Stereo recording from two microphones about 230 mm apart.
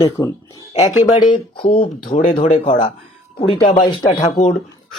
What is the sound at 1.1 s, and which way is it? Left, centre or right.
Speech, left.